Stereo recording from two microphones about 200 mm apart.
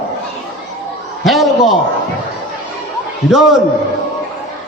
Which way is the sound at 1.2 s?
Centre (ahead or behind).